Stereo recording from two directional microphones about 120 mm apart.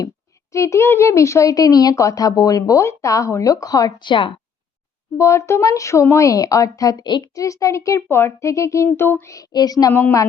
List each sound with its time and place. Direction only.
0.5 s speech: 25° left (ahead or behind)
4.1 s speech: 45° left (ahead or behind)
5.1 s speech: 25° left (ahead or behind)
9.9 s a woman's voice: 15° left (ahead or behind)